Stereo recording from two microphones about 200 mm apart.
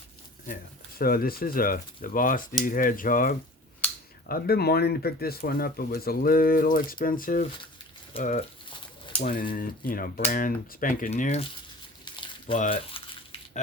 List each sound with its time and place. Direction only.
0.4 s speech: 45° left (ahead or behind)
8.1 s speech: 35° left (ahead or behind)
9.2 s speech: 45° left (ahead or behind)
12.0 s a sound: 25° left (ahead or behind)
12.5 s speech: 30° left (ahead or behind)